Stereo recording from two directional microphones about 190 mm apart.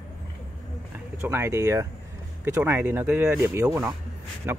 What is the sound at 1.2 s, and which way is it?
A man's voice, 10° right (ahead or behind).